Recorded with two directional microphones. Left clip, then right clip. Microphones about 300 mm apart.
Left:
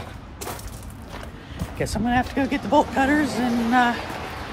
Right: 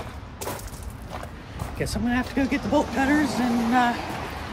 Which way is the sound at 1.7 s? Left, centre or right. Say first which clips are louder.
Left 4 dB; centre.